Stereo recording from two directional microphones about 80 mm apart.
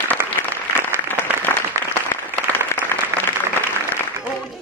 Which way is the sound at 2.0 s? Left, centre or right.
Left.